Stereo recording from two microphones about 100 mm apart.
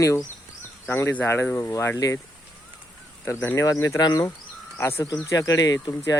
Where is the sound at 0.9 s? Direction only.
20° left (ahead or behind).